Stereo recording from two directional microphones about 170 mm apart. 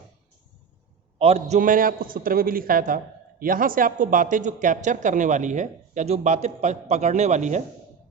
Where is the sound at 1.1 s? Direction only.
35° right (ahead or behind).